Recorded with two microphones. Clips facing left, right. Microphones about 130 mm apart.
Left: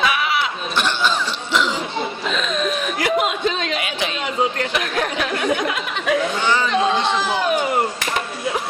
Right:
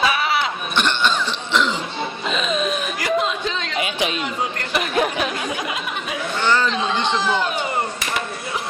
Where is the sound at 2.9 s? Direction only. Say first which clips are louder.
Left 2 dB; 60° left (ahead or behind).